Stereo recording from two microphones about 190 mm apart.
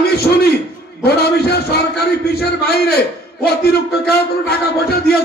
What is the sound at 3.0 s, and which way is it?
A man's voice, 55° left (ahead or behind).